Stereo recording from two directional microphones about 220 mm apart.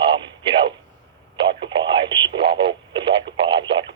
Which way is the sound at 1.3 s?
25° right (ahead or behind).